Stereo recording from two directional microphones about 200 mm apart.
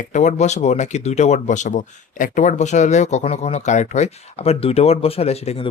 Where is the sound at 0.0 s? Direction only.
35° left (ahead or behind).